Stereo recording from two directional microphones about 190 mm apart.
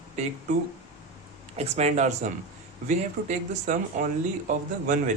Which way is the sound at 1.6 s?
35° right (ahead or behind).